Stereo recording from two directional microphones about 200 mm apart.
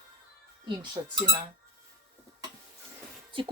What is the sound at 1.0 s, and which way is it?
Speech, 25° right (ahead or behind).